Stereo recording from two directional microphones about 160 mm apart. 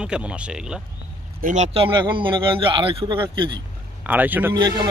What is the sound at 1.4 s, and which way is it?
A man's voice, 50° right (ahead or behind).